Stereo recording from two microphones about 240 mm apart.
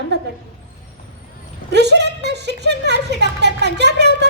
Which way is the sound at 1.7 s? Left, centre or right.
Right.